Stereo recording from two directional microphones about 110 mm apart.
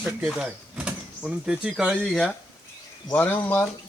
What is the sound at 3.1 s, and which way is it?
Speech, 15° left (ahead or behind).